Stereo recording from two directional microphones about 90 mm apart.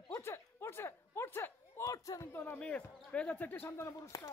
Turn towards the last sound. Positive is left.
turn(degrees=30)  # may be behind; listen again after turning